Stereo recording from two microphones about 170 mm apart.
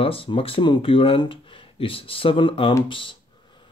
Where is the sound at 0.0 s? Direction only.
30° left (ahead or behind).